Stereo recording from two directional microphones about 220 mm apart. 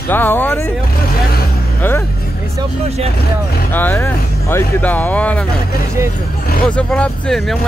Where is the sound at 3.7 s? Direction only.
10° left (ahead or behind).